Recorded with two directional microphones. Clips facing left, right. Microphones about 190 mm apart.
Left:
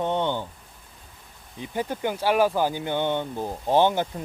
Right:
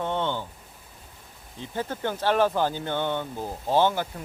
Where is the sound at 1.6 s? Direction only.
15° left (ahead or behind).